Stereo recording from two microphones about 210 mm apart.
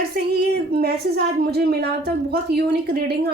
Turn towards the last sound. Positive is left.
turn(degrees=-45)  # may be behind; listen again after turning